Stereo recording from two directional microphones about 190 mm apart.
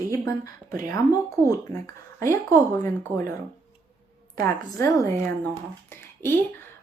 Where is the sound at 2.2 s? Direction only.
15° left (ahead or behind).